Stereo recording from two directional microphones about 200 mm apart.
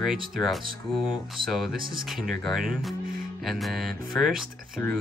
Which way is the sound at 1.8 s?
25° right (ahead or behind).